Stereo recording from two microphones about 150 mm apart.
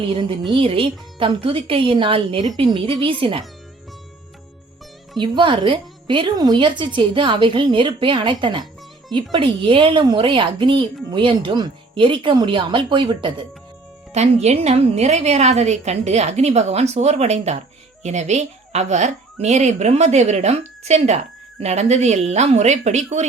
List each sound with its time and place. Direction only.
0.5 s a woman's voice: 35° right (ahead or behind)
5.1 s a woman's voice: 30° right (ahead or behind)
14.1 s a woman's voice: 45° right (ahead or behind)